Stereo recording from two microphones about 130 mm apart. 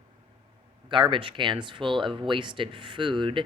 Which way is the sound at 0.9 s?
40° right (ahead or behind).